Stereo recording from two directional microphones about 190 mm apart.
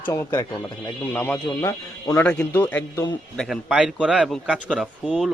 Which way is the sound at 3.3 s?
Centre (ahead or behind).